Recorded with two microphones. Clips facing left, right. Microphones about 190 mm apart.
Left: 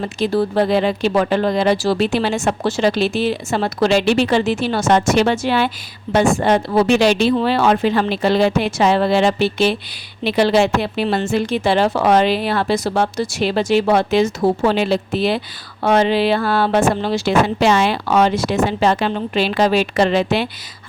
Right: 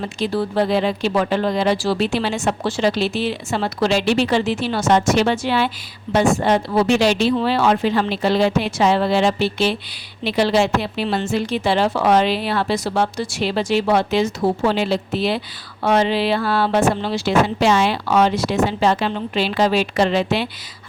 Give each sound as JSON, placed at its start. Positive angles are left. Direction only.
{"t": 0.2, "sound": "speech", "side_deg": 50}